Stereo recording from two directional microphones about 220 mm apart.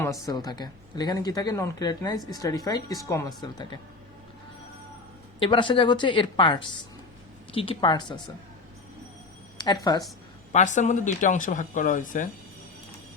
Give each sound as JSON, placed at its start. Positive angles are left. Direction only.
{"t": 0.0, "sound": "a woman's voice", "side_deg": 15}
{"t": 5.4, "sound": "a woman's voice", "side_deg": 20}
{"t": 9.6, "sound": "a sound", "side_deg": 20}
{"t": 10.5, "sound": "speech", "side_deg": 35}